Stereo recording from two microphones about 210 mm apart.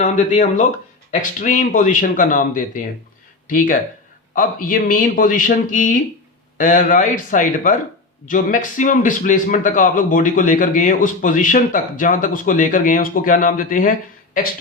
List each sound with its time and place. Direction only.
0.0 s a man's voice: 35° left (ahead or behind)